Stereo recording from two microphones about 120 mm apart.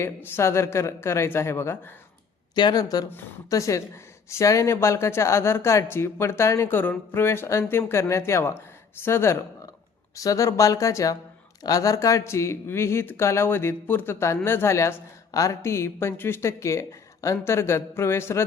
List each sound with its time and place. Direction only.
0.0 s speech: 20° left (ahead or behind)
2.6 s speech: 35° left (ahead or behind)